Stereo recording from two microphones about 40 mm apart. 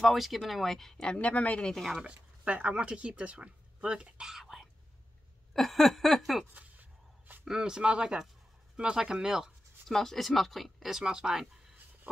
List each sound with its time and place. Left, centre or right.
0.0 s speech: centre
1.0 s speech: left
2.0 s speech: right
5.5 s speech: centre
6.5 s a sound: right
7.4 s speech: centre
9.8 s speech: centre
11.0 s speech: centre